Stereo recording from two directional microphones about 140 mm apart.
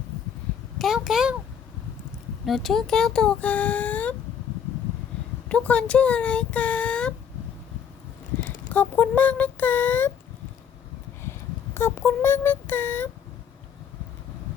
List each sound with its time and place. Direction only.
0.8 s a sound: centre (ahead or behind)
2.5 s speech: centre (ahead or behind)
5.5 s speech: 10° left (ahead or behind)
8.7 s speech: 10° left (ahead or behind)
11.2 s child singing: 15° left (ahead or behind)